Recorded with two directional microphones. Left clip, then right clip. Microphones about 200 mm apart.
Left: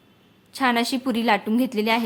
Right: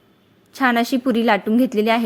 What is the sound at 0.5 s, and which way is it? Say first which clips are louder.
A woman's voice: right 4 dB; 15° right (ahead or behind).